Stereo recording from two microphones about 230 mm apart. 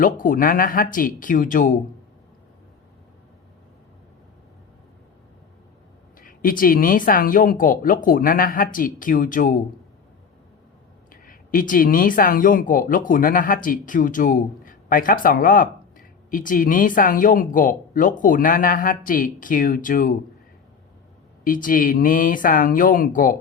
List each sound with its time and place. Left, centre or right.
0.0 s speech: left
6.1 s speech: left
11.1 s speech: left
21.4 s speech: left